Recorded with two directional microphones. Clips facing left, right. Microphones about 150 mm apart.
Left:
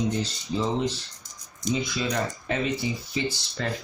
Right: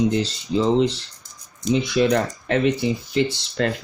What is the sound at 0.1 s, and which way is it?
Speech, 80° right.